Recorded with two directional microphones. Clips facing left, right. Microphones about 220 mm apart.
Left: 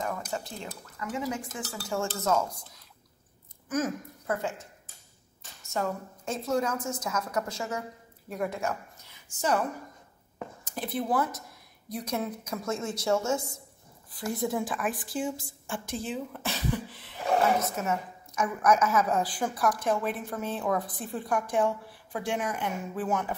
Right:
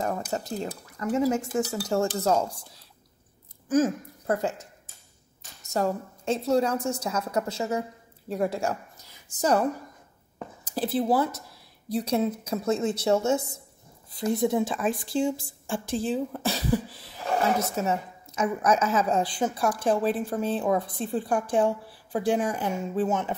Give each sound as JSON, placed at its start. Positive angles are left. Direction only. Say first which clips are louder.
{"t": 0.0, "sound": "a woman's voice", "louder": "right 4 dB", "side_deg": -40}
{"t": 5.7, "sound": "a woman's voice", "louder": "right 5 dB", "side_deg": -35}